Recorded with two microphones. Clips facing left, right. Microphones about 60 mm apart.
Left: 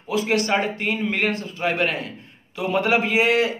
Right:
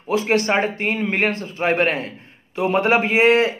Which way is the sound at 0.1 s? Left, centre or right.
Right.